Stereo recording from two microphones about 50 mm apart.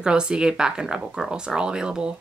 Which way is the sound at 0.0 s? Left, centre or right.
Centre.